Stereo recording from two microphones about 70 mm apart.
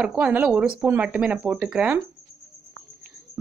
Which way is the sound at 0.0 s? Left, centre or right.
Centre.